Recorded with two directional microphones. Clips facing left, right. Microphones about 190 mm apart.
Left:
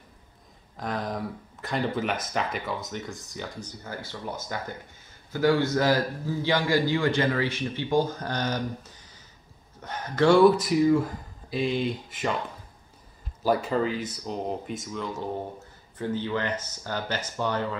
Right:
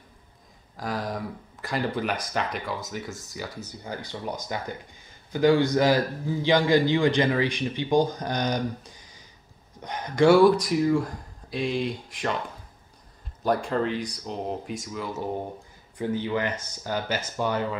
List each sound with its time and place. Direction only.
0.7 s speech: centre (ahead or behind)
3.8 s a man's voice: 15° right (ahead or behind)
10.4 s speech: centre (ahead or behind)
13.4 s a man's voice: 5° left (ahead or behind)